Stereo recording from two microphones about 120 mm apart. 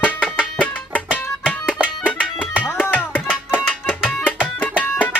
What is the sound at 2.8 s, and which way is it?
Music, 15° left (ahead or behind).